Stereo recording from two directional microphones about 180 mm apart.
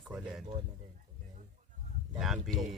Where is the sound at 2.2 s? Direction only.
Centre (ahead or behind).